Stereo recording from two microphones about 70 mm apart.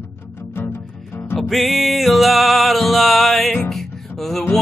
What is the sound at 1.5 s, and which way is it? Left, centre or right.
Music, centre.